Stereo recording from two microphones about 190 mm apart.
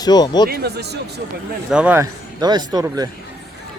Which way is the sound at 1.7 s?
10° right (ahead or behind).